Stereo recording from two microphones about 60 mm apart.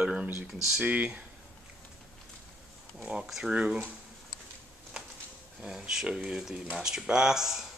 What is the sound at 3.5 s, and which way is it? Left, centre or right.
Speech, centre.